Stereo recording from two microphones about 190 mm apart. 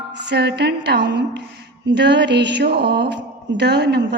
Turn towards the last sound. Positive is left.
turn(degrees=-65)  # may be behind; listen again after turning